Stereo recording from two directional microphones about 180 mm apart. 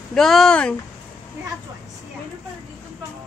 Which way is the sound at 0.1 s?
Centre (ahead or behind).